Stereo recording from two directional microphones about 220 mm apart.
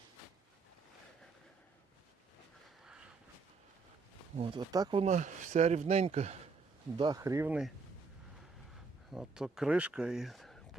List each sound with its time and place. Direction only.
2.8 s a sound: 5° right (ahead or behind)
4.4 s speech: 20° right (ahead or behind)
7.0 s speech: 15° right (ahead or behind)
9.1 s speech: centre (ahead or behind)